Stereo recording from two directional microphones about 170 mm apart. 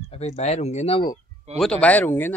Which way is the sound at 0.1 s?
40° left (ahead or behind).